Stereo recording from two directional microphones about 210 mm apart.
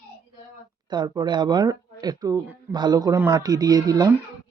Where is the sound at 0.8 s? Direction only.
20° right (ahead or behind).